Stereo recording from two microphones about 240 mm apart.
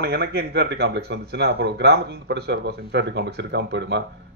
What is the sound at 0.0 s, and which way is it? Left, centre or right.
A man's voice, right.